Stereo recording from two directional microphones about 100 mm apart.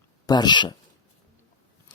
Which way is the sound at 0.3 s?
45° left (ahead or behind).